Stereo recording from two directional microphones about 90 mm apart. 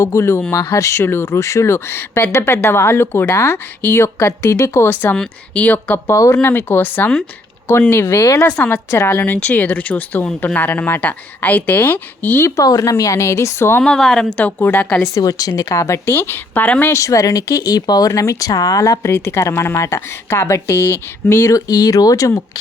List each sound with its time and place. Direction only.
0.0 s speech: 30° left (ahead or behind)
5.1 s speech: 10° left (ahead or behind)
6.1 s speech: 35° left (ahead or behind)
8.4 s speech: 15° left (ahead or behind)
8.9 s speech: 30° left (ahead or behind)
12.5 s speech: 40° left (ahead or behind)
13.8 s speech: 5° left (ahead or behind)
14.6 s speech: 20° left (ahead or behind)
15.0 s speech: 40° left (ahead or behind); by 16.9 s 15° left (ahead or behind)
16.9 s speech: 35° left (ahead or behind)
19.1 s speech: 30° left (ahead or behind)